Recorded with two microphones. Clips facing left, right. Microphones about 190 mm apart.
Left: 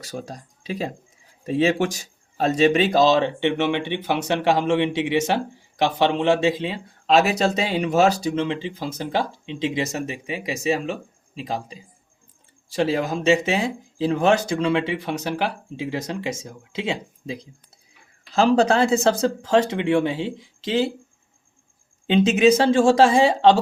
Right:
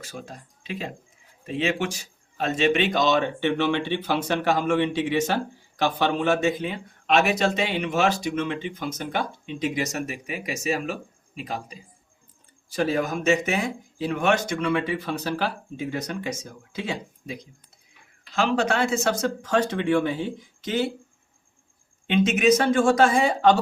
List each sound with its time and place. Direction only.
0.0 s speech: 40° left (ahead or behind)
22.0 s speech: 30° left (ahead or behind)